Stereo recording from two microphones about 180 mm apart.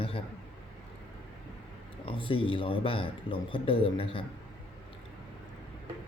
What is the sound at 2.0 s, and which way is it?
Speech, 30° left (ahead or behind).